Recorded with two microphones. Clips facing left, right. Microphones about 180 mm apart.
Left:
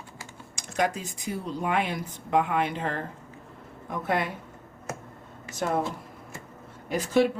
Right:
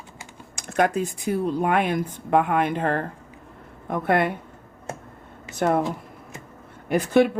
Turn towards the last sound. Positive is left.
turn(degrees=-55)  # may be behind; listen again after turning